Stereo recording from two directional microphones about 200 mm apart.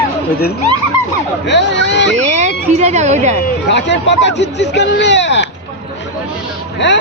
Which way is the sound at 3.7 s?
60° left (ahead or behind).